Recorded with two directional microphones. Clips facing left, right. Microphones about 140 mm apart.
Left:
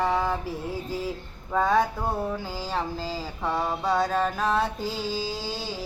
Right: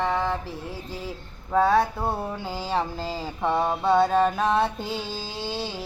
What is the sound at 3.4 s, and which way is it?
Mantra, 20° right (ahead or behind).